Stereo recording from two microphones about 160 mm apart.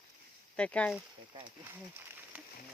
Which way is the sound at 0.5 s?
5° left (ahead or behind).